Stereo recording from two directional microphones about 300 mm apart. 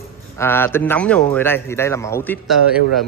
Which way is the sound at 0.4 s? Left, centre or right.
Centre.